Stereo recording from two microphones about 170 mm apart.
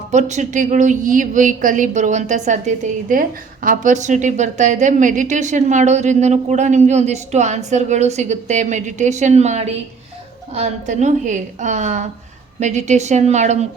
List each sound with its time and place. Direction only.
0.1 s a woman's voice: 45° right (ahead or behind)